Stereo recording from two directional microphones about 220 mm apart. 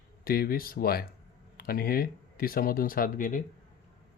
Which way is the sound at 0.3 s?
45° left (ahead or behind).